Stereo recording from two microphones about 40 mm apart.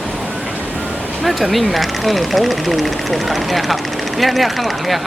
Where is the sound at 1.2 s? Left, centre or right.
Centre.